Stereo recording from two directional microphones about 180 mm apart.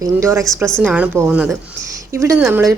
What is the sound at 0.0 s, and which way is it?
A woman's voice, 15° right (ahead or behind).